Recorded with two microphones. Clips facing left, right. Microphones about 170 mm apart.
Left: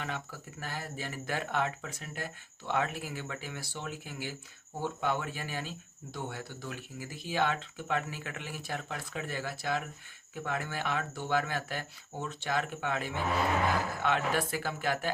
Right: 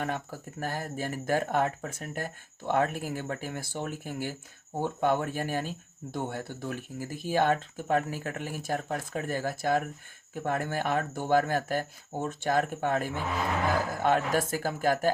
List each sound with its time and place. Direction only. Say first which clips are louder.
0.0 s speech: right 6 dB; 45° right (ahead or behind)